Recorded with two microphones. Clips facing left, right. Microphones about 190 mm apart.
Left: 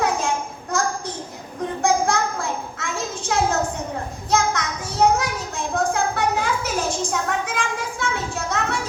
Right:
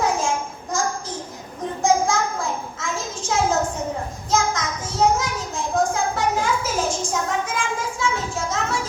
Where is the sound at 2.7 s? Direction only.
60° left (ahead or behind).